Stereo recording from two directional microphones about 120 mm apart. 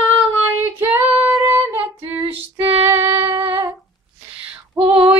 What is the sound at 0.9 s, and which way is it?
Female singing, 15° right (ahead or behind).